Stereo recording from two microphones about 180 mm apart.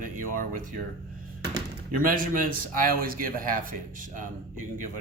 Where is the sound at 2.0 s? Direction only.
50° right (ahead or behind).